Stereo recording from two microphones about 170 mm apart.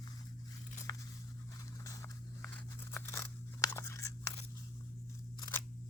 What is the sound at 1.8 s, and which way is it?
Scissors, 15° left (ahead or behind).